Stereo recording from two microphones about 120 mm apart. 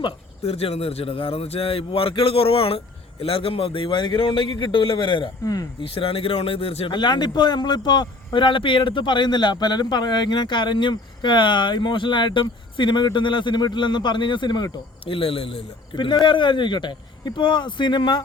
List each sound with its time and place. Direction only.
0.4 s a man's voice: 55° left (ahead or behind); by 18.2 s 40° left (ahead or behind)